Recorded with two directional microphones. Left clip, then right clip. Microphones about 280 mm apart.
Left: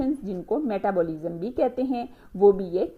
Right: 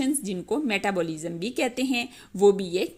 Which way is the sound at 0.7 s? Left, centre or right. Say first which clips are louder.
Left 2 dB; right.